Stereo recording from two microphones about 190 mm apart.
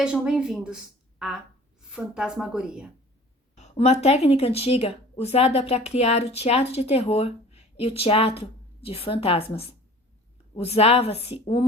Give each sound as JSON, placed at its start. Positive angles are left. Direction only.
{"t": 0.0, "sound": "a woman's voice", "side_deg": -5}
{"t": 3.5, "sound": "speech", "side_deg": 35}